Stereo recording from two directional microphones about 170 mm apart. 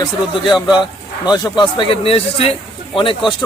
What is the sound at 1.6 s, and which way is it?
Speech, 30° left (ahead or behind).